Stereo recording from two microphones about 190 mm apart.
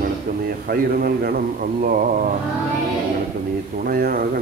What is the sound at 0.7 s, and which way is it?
Speech, 50° right (ahead or behind).